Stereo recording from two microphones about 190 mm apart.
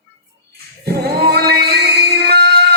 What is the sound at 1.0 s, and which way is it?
Male singing, 55° right (ahead or behind).